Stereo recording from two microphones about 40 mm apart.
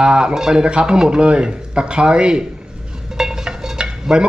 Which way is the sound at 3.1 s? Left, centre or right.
Centre.